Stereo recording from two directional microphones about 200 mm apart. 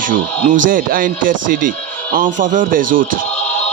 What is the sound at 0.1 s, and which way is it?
Speech, 40° right (ahead or behind).